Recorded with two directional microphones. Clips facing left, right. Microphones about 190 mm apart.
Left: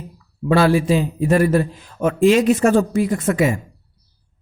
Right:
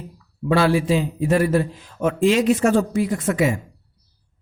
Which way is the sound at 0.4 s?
45° left (ahead or behind).